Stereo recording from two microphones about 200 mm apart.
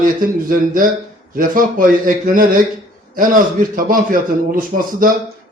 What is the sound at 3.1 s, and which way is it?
A man's voice, 45° right (ahead or behind).